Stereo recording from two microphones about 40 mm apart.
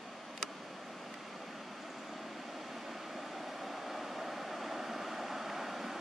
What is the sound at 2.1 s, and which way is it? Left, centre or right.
Vehicle, centre.